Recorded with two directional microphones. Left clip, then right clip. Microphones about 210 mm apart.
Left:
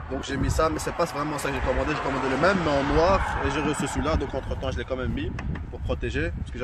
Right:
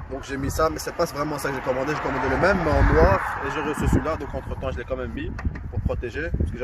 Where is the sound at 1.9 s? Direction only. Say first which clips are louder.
Right 2 dB; 55° left (ahead or behind).